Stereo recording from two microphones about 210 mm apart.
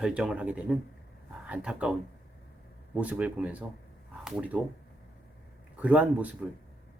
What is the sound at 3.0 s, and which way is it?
Speech, 5° right (ahead or behind).